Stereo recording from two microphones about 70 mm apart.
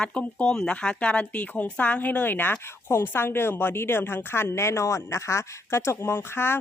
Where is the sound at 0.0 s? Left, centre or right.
Centre.